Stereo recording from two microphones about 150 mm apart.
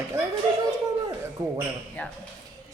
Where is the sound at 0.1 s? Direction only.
15° right (ahead or behind).